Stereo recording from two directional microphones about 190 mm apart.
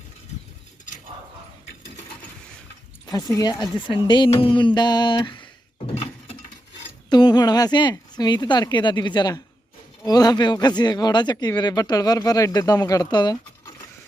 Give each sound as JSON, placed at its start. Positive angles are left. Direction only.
{"t": 3.1, "sound": "speech", "side_deg": 20}